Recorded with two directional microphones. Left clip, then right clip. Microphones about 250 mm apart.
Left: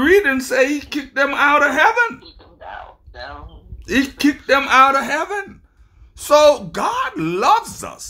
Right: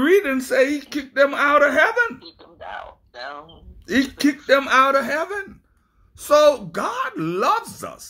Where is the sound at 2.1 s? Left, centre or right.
Right.